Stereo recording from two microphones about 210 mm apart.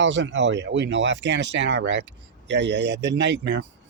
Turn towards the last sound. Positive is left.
turn(degrees=-55)  # may be behind; listen again after turning